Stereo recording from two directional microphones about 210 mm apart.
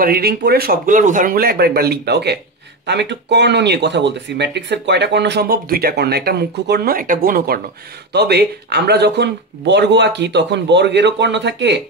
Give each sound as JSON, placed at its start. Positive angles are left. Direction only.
{"t": 0.0, "sound": "speech", "side_deg": -45}